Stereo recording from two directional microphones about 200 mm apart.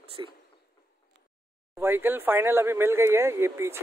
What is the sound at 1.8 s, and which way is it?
Speech, 10° right (ahead or behind).